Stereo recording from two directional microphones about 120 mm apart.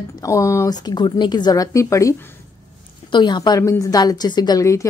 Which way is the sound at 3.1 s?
40° left (ahead or behind).